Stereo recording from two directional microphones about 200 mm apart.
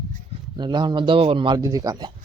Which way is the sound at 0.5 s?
20° right (ahead or behind).